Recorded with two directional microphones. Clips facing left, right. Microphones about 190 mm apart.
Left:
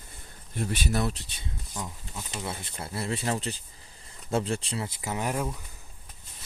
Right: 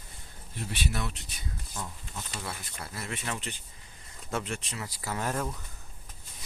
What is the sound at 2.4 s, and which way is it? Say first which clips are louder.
Speech: left 4 dB; 25° left (ahead or behind).